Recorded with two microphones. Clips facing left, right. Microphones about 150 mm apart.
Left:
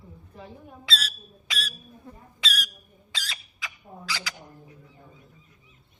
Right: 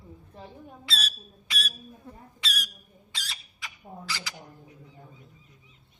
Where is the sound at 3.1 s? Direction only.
90° left.